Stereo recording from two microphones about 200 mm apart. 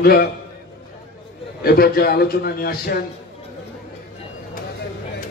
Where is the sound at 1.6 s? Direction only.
50° left (ahead or behind).